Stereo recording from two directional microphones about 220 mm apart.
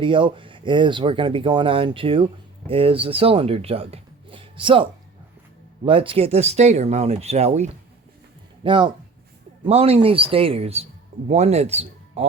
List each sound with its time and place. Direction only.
0.0 s speech: 20° right (ahead or behind)